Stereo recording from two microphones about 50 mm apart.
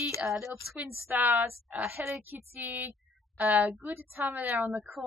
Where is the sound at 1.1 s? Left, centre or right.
Right.